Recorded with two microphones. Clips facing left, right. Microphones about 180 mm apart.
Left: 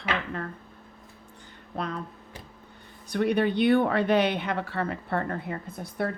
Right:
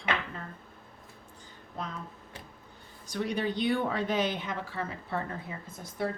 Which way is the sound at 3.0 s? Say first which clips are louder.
Left 7 dB; 60° left (ahead or behind).